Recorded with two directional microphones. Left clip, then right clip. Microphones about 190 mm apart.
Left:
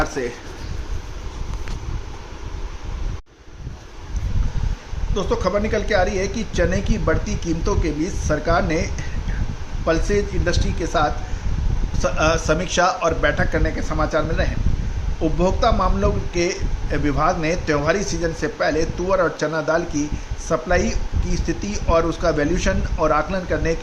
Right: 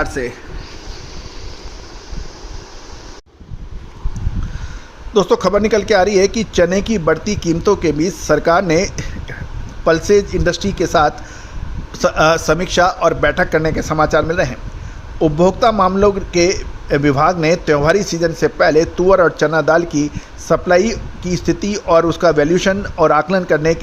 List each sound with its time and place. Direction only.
0.2 s speech: 40° right (ahead or behind)
5.1 s a man's voice: 50° right (ahead or behind)